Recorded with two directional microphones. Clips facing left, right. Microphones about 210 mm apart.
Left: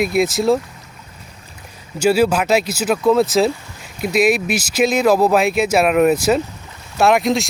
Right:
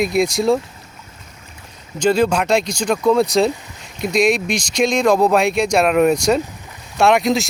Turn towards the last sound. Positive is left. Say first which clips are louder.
# even
turn(degrees=0)  # may be behind; listen again after turning